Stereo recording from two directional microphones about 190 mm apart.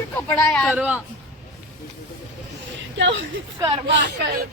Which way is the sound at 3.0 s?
75° right (ahead or behind).